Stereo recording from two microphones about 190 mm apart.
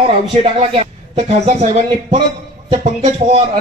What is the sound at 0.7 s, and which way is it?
Speech, 35° right (ahead or behind).